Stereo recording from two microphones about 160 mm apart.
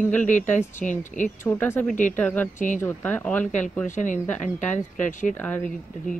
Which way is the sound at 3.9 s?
50° left (ahead or behind).